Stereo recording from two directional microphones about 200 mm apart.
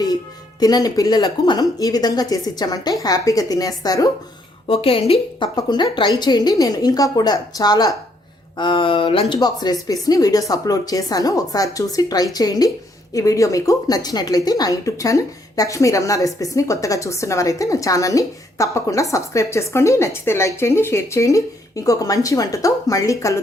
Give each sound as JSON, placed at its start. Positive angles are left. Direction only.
{"t": 0.6, "sound": "a woman's voice", "side_deg": 20}